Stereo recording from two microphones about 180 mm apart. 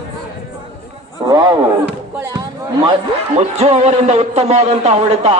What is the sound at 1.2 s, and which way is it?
Speech, 20° right (ahead or behind).